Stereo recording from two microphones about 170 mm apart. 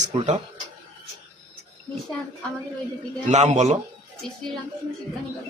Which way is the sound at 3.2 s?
45° right (ahead or behind).